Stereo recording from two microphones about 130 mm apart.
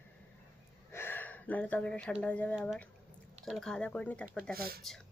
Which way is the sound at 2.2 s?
10° left (ahead or behind).